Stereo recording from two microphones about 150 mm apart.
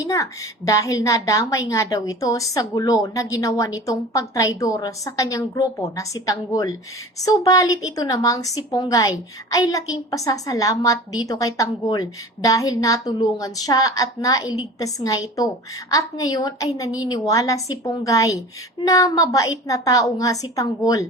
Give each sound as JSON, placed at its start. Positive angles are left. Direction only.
{"t": 0.0, "sound": "a woman's voice", "side_deg": 20}